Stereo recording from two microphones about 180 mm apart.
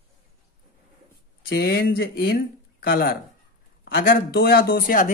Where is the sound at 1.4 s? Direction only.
60° left (ahead or behind).